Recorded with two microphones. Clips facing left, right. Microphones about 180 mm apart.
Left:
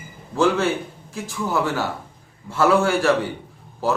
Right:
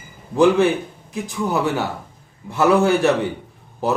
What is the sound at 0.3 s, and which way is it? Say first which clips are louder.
A man's voice: right 5 dB; 15° right (ahead or behind).